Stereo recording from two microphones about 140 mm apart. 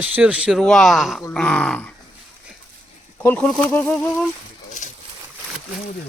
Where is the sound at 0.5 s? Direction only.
5° left (ahead or behind).